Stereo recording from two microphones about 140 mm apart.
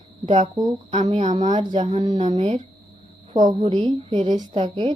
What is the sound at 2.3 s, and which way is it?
Speech, 50° right (ahead or behind).